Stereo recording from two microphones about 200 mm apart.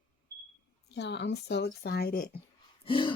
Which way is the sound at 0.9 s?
60° left (ahead or behind).